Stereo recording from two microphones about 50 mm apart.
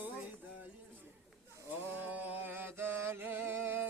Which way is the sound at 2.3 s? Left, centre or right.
Right.